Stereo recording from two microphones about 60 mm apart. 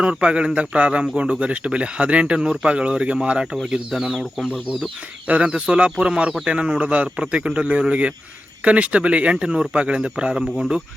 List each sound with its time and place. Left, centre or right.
0.0 s speech: centre
5.3 s speech: centre